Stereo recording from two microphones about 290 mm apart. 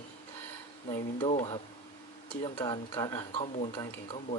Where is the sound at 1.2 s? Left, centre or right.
Centre.